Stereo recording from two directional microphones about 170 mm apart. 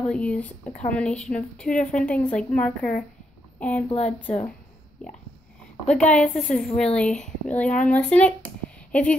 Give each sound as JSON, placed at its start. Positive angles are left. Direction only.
{"t": 0.0, "sound": "a woman's voice", "side_deg": 5}
{"t": 3.9, "sound": "speech", "side_deg": 35}
{"t": 5.9, "sound": "a woman's voice", "side_deg": 5}